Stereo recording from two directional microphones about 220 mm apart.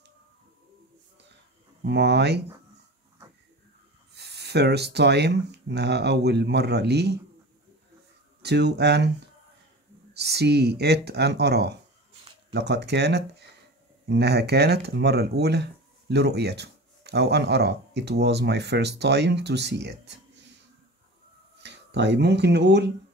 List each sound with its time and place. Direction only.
1.9 s speech: 50° right (ahead or behind)
4.2 s speech: 50° right (ahead or behind)
8.4 s speech: 50° right (ahead or behind)
10.1 s speech: 50° right (ahead or behind)
21.6 s speech: 50° right (ahead or behind)